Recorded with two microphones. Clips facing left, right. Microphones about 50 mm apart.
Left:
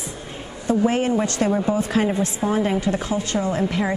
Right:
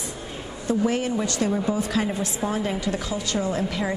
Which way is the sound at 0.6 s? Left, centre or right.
Left.